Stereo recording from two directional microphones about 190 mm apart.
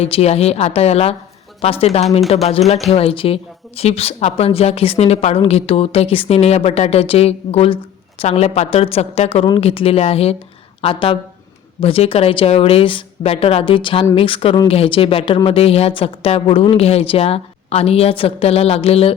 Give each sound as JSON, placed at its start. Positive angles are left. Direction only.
{"t": 0.0, "sound": "a woman's voice", "side_deg": 30}